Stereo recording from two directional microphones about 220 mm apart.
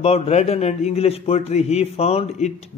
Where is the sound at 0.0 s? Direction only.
30° left (ahead or behind).